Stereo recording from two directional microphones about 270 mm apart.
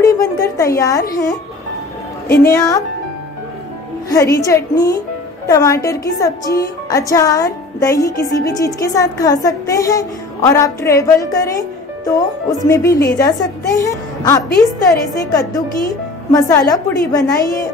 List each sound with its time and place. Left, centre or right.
0.0 s a sound: centre
1.1 s a woman's voice: centre
2.2 s a woman's voice: left
2.5 s a woman's voice: centre
4.1 s a woman's voice: centre
16.3 s a woman's voice: centre